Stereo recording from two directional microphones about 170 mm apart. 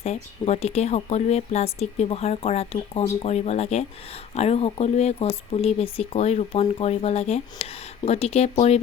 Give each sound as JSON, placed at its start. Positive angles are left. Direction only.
{"t": 0.0, "sound": "speech", "side_deg": 40}